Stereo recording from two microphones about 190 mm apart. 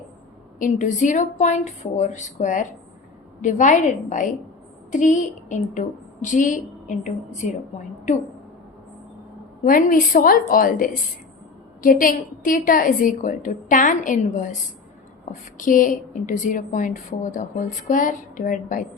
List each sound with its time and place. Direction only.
0.6 s a woman's voice: 40° left (ahead or behind)
9.6 s a woman's voice: 45° left (ahead or behind)